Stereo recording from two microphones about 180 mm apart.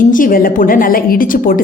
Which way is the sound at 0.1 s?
50° left (ahead or behind).